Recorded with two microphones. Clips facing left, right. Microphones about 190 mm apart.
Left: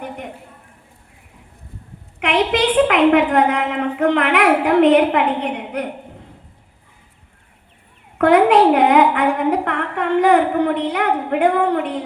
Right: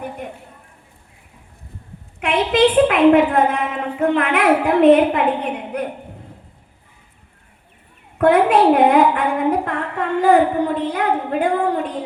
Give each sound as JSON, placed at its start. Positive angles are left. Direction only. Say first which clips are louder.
{"t": 2.1, "sound": "a woman's voice", "louder": "right 1 dB", "side_deg": 75}
{"t": 8.2, "sound": "a woman's voice", "louder": "left 1 dB", "side_deg": 80}